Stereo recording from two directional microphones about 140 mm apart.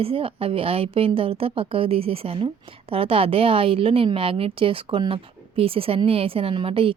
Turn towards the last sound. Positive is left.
turn(degrees=-40)  # may be behind; listen again after turning